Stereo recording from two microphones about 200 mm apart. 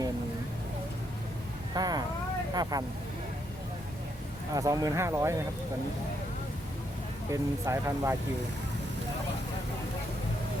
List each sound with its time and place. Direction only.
1.7 s a sound: 20° right (ahead or behind)
2.6 s speech: 20° right (ahead or behind)
4.5 s speech: 15° right (ahead or behind)
7.3 s speech: 15° right (ahead or behind)